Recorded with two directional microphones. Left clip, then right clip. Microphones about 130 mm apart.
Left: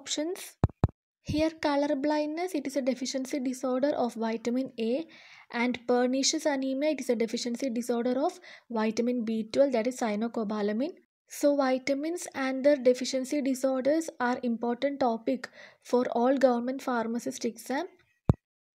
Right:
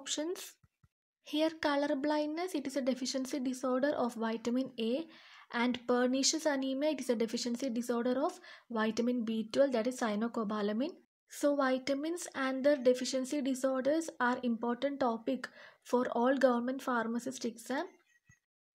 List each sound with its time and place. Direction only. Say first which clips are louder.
0.0 s speech: left 5 dB; 30° left (ahead or behind)